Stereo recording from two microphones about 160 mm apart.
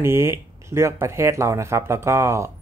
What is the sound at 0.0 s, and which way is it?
Speech, 15° right (ahead or behind).